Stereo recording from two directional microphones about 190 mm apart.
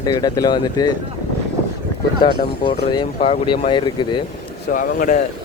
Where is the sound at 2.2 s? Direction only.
25° left (ahead or behind).